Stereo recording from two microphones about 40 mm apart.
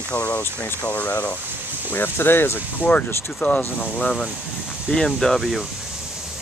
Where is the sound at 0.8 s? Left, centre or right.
Left.